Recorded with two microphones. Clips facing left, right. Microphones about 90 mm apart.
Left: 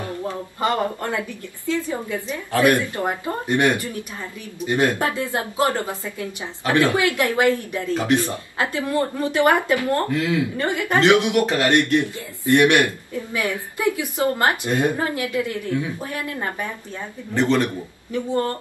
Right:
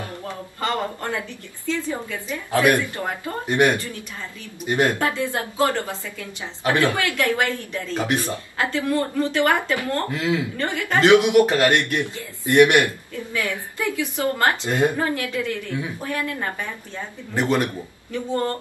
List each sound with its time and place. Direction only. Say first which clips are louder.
0.0 s speech: left 4 dB; 20° left (ahead or behind)
2.5 s speech: left 1 dB; 20° right (ahead or behind)
2.9 s speech: left 4 dB; 25° left (ahead or behind)
3.4 s speech: right 1 dB; 20° right (ahead or behind)
4.9 s speech: even; 20° left (ahead or behind)
10.1 s speech: left 1 dB; 20° right (ahead or behind)
10.6 s speech: left 1 dB; 20° left (ahead or behind)
11.1 s speech: right 4 dB; 20° right (ahead or behind)
11.5 s speech: even; 20° left (ahead or behind)
12.4 s speech: right 1 dB; 20° right (ahead or behind)
12.8 s speech: left 1 dB; 20° left (ahead or behind)
17.3 s speech: left 2 dB; 15° right (ahead or behind)
18.1 s speech: left 1 dB; 15° left (ahead or behind)